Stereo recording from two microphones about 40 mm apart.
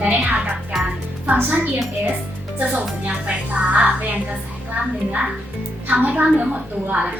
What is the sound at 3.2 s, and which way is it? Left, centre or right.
Speech, right.